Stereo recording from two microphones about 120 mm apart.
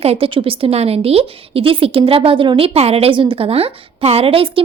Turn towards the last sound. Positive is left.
turn(degrees=-50)  # may be behind; listen again after turning